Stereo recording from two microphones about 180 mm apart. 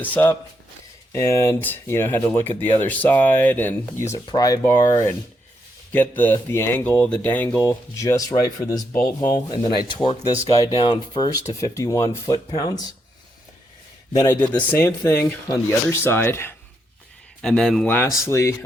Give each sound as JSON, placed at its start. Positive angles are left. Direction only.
{"t": 0.0, "sound": "speech", "side_deg": 10}
{"t": 14.4, "sound": "speech", "side_deg": 10}
{"t": 17.4, "sound": "speech", "side_deg": 0}